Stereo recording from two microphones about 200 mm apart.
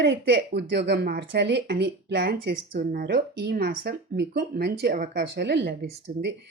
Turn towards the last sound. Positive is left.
turn(degrees=-60)  # may be behind; listen again after turning